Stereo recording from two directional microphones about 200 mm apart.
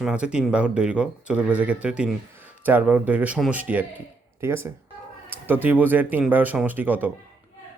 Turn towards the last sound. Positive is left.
turn(degrees=-10)  # may be behind; listen again after turning